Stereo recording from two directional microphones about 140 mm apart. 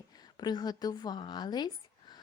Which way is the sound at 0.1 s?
30° left (ahead or behind).